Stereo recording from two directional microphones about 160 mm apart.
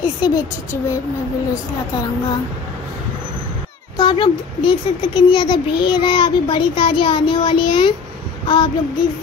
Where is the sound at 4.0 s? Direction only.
30° left (ahead or behind).